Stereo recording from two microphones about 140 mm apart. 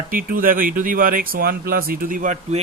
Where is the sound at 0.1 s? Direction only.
90° right.